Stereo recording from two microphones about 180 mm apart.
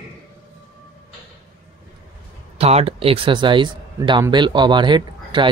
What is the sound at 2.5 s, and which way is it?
Speech, 35° right (ahead or behind).